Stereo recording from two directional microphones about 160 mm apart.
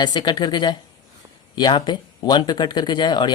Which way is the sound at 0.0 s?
25° left (ahead or behind).